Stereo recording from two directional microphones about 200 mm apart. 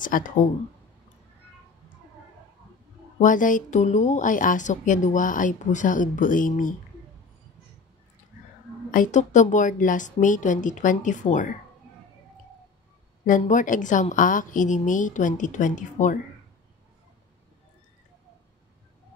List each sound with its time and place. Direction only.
0.0 s a woman's voice: 40° left (ahead or behind)
3.2 s a woman's voice: 40° left (ahead or behind)
8.9 s a woman's voice: 40° left (ahead or behind)
13.2 s a woman's voice: 40° left (ahead or behind)